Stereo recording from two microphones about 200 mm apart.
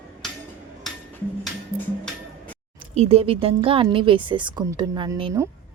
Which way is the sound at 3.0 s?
30° right (ahead or behind).